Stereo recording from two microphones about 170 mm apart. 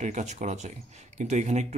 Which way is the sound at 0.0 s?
45° right (ahead or behind).